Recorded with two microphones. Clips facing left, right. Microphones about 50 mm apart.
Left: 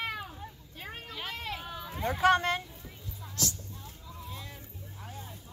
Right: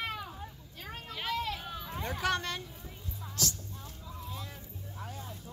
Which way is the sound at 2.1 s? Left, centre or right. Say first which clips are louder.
Left 8 dB; left.